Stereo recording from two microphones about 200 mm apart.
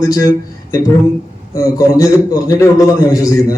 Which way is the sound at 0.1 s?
20° left (ahead or behind).